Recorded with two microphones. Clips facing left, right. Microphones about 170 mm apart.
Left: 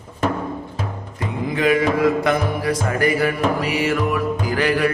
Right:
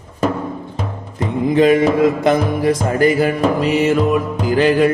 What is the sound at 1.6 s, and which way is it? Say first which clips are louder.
Music: right 5 dB; 25° right (ahead or behind).